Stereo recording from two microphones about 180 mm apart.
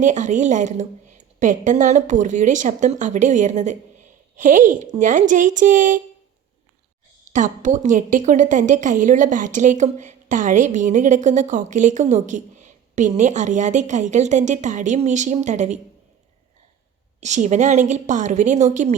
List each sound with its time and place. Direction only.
0.0 s a woman's voice: 45° right (ahead or behind)
7.3 s a woman's voice: 45° right (ahead or behind)
17.2 s a woman's voice: 40° right (ahead or behind)